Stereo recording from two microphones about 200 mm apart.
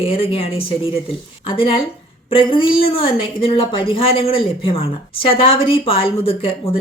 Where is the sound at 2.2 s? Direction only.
25° left (ahead or behind).